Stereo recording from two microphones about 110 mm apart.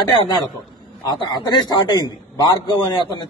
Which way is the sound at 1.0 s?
40° left (ahead or behind).